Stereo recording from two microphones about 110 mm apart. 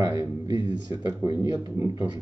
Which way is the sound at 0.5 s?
40° right (ahead or behind).